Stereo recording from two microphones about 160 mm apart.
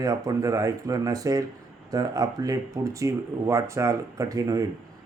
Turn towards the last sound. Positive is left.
turn(degrees=-20)  # may be behind; listen again after turning